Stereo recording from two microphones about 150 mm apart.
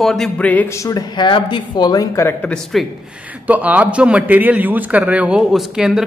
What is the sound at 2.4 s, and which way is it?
Speech, 5° left (ahead or behind).